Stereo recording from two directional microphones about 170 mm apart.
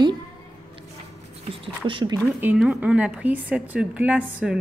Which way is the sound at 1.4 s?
30° right (ahead or behind).